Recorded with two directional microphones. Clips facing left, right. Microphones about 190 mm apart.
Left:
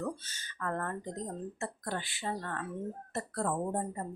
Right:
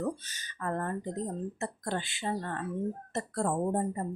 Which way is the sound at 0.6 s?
15° right (ahead or behind).